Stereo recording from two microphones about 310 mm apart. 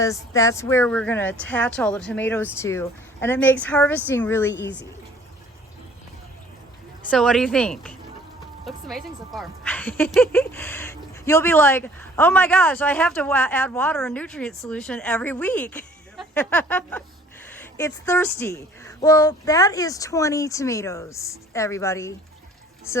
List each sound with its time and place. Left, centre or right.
0.0 s a woman's voice: centre
4.5 s speech: left
7.1 s a woman's voice: centre